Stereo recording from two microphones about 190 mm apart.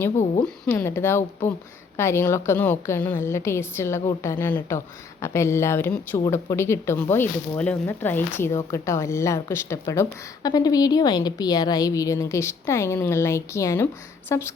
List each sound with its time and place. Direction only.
0.4 s speech: 5° left (ahead or behind)